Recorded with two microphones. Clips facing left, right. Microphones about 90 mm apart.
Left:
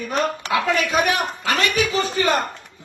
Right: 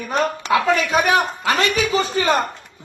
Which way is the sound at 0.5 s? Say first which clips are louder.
Right 3 dB; 30° right (ahead or behind).